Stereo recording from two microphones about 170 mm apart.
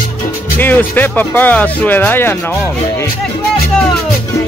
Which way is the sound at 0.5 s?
10° left (ahead or behind).